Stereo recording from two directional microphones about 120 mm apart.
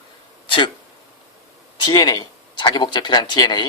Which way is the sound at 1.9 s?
35° left (ahead or behind).